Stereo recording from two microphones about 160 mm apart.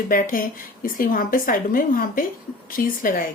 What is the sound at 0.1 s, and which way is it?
Speech, 60° left (ahead or behind).